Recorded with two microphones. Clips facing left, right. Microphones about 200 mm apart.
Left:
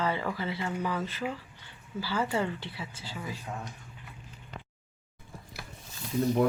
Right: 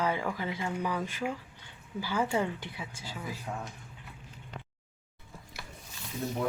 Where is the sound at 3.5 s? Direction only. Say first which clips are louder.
Right 2 dB; 5° left (ahead or behind).